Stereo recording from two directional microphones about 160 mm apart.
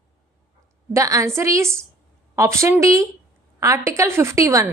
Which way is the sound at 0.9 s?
20° right (ahead or behind).